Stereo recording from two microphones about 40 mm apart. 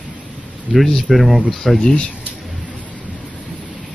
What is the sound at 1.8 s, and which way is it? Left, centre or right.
Speech, left.